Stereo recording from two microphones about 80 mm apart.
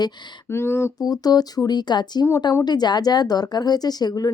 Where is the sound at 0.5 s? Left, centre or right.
Left.